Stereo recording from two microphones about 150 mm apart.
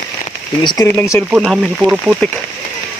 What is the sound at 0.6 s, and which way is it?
Speech, 30° left (ahead or behind).